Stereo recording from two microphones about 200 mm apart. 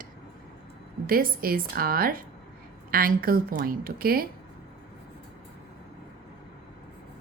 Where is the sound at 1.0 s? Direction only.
45° right (ahead or behind).